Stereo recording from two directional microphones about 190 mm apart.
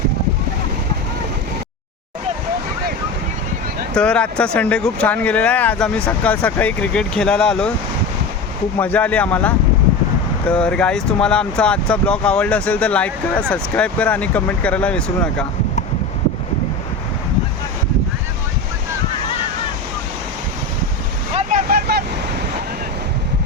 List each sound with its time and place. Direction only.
3.9 s speech: 5° left (ahead or behind)
8.8 s speech: 10° left (ahead or behind)
21.3 s vehicle: 45° right (ahead or behind)